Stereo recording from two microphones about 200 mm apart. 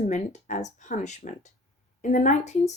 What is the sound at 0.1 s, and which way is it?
Speech, 35° left (ahead or behind).